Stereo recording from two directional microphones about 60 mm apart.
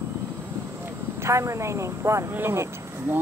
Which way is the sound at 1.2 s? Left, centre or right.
Right.